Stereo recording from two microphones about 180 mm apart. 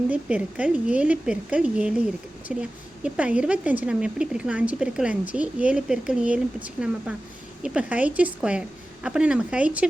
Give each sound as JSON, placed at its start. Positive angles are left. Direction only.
{"t": 0.1, "sound": "speech", "side_deg": -10}